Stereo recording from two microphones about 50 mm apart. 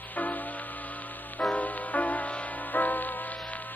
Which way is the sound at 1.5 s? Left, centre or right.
Left.